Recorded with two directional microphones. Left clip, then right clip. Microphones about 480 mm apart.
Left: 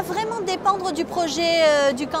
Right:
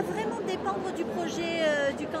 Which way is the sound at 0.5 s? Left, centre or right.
Left.